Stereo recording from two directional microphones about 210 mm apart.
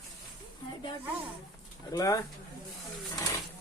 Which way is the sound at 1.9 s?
15° left (ahead or behind).